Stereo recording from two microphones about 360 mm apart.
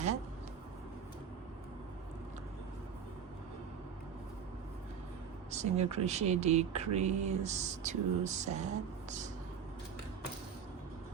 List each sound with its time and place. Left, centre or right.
5.5 s speech: centre